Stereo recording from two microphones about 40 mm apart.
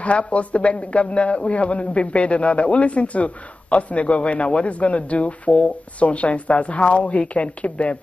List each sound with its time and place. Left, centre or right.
0.0 s a man's voice: left